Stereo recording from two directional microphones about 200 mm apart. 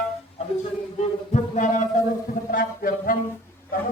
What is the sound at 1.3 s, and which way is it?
Music, 40° left (ahead or behind).